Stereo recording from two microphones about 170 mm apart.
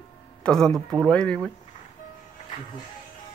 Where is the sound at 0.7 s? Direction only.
20° right (ahead or behind).